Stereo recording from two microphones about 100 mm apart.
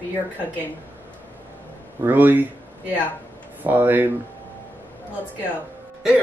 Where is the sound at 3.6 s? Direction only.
15° right (ahead or behind).